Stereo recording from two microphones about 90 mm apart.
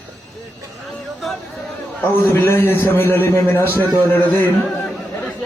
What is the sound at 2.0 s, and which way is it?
A man's voice, 25° left (ahead or behind).